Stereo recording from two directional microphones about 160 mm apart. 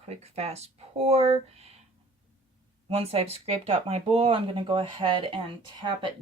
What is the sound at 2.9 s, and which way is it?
Speech, 40° right (ahead or behind).